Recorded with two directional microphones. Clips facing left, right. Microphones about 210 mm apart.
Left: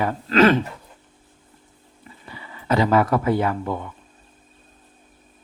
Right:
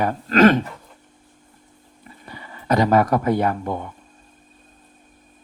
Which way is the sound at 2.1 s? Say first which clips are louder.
Right 1 dB; 45° right (ahead or behind).